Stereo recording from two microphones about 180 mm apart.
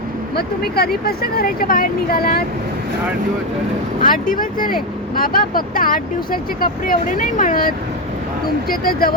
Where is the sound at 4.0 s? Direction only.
50° left (ahead or behind).